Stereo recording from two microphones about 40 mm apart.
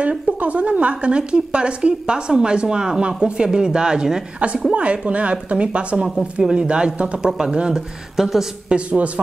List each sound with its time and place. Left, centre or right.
0.4 s a woman's voice: right; by 4.2 s centre
4.7 s speech: right
6.0 s a woman's voice: centre
7.2 s a woman's voice: centre
8.2 s speech: centre
8.9 s speech: right